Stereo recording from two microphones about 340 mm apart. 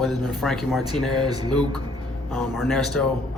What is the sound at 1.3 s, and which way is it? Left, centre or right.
Speech, centre.